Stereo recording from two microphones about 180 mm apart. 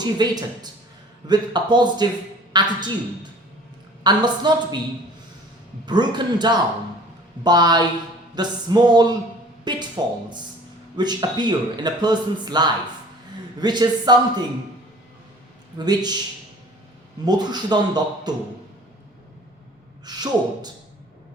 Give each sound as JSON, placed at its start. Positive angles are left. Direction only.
{"t": 0.0, "sound": "a man's voice", "side_deg": -25}
{"t": 4.0, "sound": "a man's voice", "side_deg": -25}
{"t": 5.8, "sound": "a man's voice", "side_deg": -25}
{"t": 15.8, "sound": "a man's voice", "side_deg": -25}
{"t": 17.2, "sound": "a man's voice", "side_deg": -25}
{"t": 20.1, "sound": "a man's voice", "side_deg": -25}